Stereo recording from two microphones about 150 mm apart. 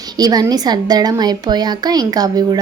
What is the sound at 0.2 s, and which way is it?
A woman's voice, 25° right (ahead or behind).